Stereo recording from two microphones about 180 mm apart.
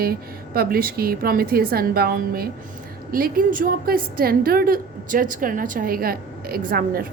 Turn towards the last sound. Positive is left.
turn(degrees=-55)  # may be behind; listen again after turning